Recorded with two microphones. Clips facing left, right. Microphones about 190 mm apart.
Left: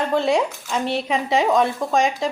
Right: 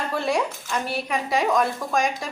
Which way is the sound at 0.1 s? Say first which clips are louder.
Left 3 dB; 20° left (ahead or behind).